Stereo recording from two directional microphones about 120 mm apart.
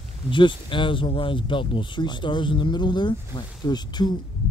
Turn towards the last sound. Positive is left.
turn(degrees=35)  # may be behind; listen again after turning